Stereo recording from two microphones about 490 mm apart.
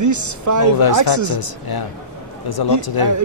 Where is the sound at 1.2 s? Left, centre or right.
Left.